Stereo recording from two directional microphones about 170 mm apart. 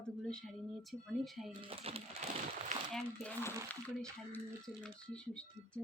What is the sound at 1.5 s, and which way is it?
Speech, 35° right (ahead or behind).